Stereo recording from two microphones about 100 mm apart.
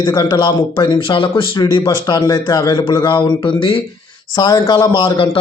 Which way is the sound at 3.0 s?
50° left (ahead or behind).